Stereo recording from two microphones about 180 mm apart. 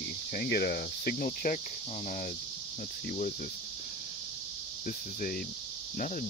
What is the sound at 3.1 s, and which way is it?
Speech, 45° left (ahead or behind).